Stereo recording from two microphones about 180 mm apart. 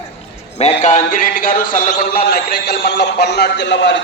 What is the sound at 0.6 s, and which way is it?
A man's voice, 40° left (ahead or behind).